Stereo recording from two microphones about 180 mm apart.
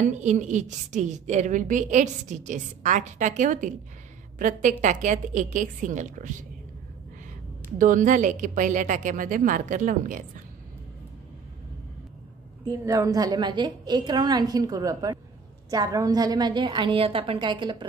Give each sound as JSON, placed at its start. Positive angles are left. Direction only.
{"t": 0.0, "sound": "a woman's voice", "side_deg": -40}
{"t": 7.8, "sound": "a woman's voice", "side_deg": -45}
{"t": 12.6, "sound": "a woman's voice", "side_deg": -20}